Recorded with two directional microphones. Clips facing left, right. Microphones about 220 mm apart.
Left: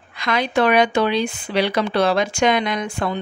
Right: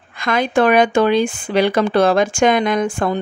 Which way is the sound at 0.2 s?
50° right (ahead or behind).